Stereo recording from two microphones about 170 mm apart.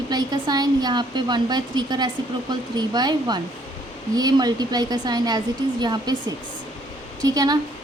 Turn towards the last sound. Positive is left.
turn(degrees=-20)  # may be behind; listen again after turning